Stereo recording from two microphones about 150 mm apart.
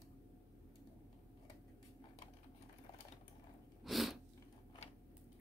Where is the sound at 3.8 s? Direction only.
Centre (ahead or behind).